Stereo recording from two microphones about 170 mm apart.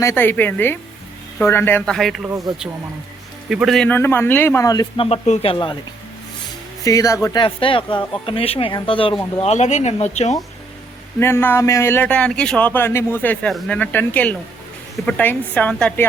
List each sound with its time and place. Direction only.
0.0 s speech: 15° left (ahead or behind)
1.8 s a man's voice: centre (ahead or behind)
3.5 s speech: centre (ahead or behind); by 5.0 s 25° left (ahead or behind)
5.0 s speech: 40° left (ahead or behind)
6.8 s speech: 20° left (ahead or behind)
7.4 s speech: 30° left (ahead or behind)
9.4 s speech: 40° left (ahead or behind)
11.2 s speech: 15° left (ahead or behind)